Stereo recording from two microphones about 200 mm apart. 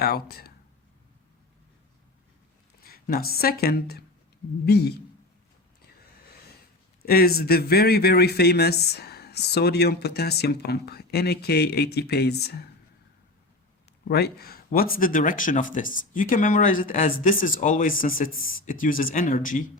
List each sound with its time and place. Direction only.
0.0 s speech: 50° left (ahead or behind)
2.8 s a man's voice: 50° left (ahead or behind)
7.0 s speech: 50° left (ahead or behind)
14.1 s speech: 50° left (ahead or behind)